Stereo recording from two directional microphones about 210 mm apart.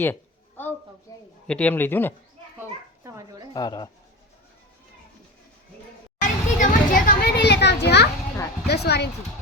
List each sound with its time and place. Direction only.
0.0 s a sound: 10° left (ahead or behind)
1.5 s speech: 5° left (ahead or behind)
2.6 s a sound: 15° right (ahead or behind)
3.5 s speech: 20° left (ahead or behind)
6.2 s children playing: 40° left (ahead or behind)
8.6 s speech: 50° left (ahead or behind)